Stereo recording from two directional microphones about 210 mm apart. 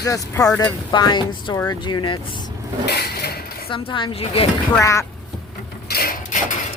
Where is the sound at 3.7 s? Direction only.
25° left (ahead or behind).